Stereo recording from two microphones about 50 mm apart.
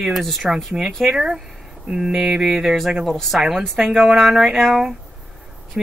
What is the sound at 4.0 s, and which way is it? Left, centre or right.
Speech, centre.